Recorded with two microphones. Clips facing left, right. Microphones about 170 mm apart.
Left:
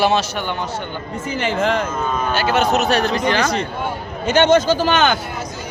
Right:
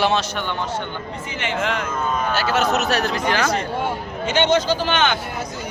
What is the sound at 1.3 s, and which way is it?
Speech, 35° left (ahead or behind).